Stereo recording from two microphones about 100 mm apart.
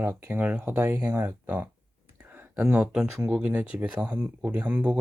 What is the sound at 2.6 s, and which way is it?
Speech, 10° right (ahead or behind).